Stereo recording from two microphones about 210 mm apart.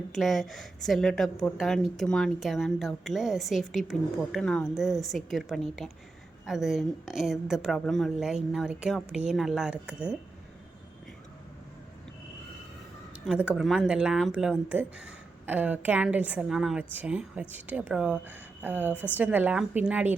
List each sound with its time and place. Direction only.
0.1 s a woman's voice: centre (ahead or behind)
13.2 s speech: 5° right (ahead or behind)